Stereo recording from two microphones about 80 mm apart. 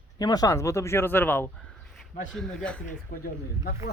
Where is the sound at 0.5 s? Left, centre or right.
Left.